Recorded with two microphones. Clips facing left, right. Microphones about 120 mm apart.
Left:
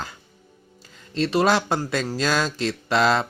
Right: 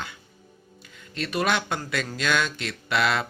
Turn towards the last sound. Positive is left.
turn(degrees=35)  # may be behind; listen again after turning